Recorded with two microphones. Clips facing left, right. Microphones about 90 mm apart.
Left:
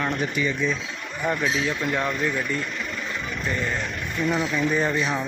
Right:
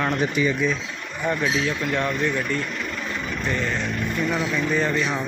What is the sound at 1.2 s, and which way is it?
Speech, 10° left (ahead or behind).